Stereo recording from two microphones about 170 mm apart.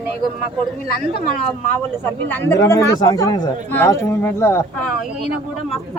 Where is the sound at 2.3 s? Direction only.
15° left (ahead or behind).